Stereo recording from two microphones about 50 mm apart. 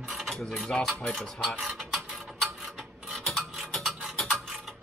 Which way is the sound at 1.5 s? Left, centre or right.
Centre.